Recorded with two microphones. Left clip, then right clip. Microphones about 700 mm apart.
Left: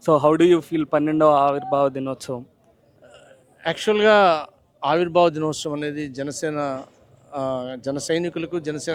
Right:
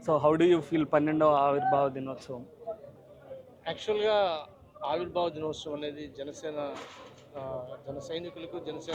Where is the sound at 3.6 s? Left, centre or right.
Left.